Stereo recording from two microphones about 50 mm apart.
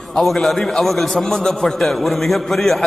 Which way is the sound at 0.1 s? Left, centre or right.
Centre.